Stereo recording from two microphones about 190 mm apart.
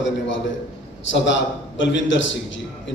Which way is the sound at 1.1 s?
70° left (ahead or behind).